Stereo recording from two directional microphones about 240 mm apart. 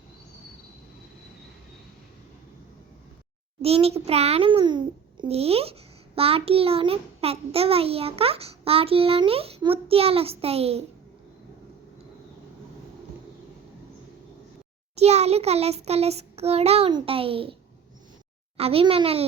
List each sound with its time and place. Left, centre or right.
3.6 s a child's voice: right
14.9 s a child's voice: right
18.5 s a child's voice: right